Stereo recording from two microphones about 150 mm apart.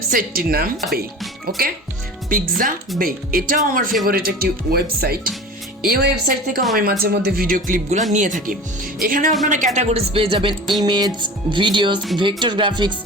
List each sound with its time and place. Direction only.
0.1 s speech: 70° right (ahead or behind); by 1.6 s 90° right
2.3 s speech: 65° right (ahead or behind)
4.0 s a woman's voice: 85° right
7.0 s speech: 90° right; by 8.5 s 55° right (ahead or behind)
9.0 s speech: 70° right (ahead or behind)
9.5 s music: 55° right (ahead or behind); by 13.0 s 30° right (ahead or behind)